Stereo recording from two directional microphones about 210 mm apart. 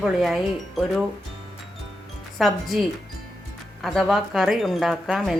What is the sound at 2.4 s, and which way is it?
Speech, centre (ahead or behind).